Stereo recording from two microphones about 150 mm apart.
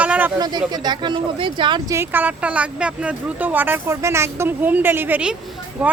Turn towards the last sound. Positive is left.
turn(degrees=-10)  # may be behind; listen again after turning